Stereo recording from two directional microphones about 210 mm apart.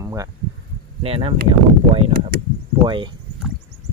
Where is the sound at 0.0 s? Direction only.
15° right (ahead or behind).